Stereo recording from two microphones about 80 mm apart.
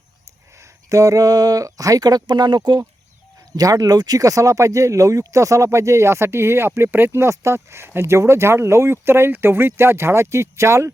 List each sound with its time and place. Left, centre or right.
0.6 s speech: right
3.5 s speech: right